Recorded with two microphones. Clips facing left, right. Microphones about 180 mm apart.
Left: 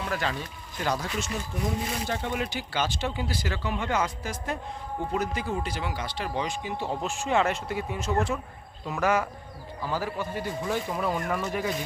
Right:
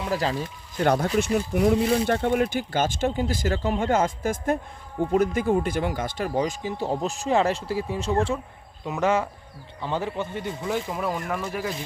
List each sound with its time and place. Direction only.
0.0 s speech: 30° right (ahead or behind)
1.2 s speech: 65° right (ahead or behind); by 10.5 s 25° right (ahead or behind)
10.7 s speech: 5° right (ahead or behind)